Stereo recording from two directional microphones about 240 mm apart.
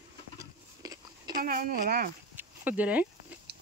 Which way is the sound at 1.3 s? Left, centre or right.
Right.